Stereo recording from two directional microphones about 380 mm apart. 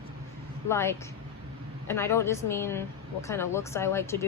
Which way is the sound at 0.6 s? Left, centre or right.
Centre.